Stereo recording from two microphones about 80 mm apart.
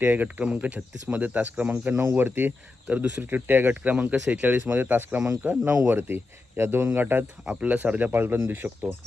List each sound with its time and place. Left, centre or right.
0.0 s speech: right
7.4 s speech: centre